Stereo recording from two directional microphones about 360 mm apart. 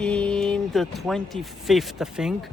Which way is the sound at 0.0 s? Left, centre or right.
Centre.